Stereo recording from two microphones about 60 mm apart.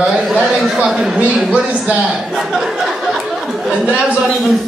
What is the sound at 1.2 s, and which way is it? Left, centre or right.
Speech, centre.